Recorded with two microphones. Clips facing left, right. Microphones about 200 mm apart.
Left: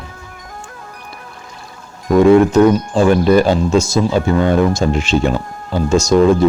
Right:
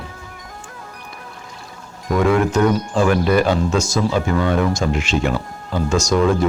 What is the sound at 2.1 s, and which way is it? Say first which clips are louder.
Speech: left 8 dB; 25° left (ahead or behind).